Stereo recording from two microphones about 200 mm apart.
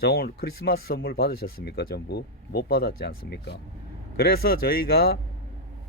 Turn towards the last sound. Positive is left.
turn(degrees=50)  # may be behind; listen again after turning